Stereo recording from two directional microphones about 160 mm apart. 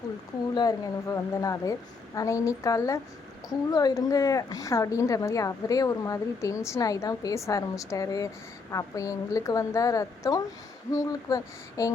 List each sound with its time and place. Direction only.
0.5 s speech: 25° left (ahead or behind)